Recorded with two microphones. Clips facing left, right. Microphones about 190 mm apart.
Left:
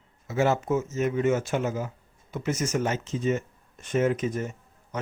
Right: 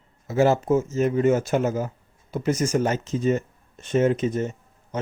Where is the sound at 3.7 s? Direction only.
25° right (ahead or behind).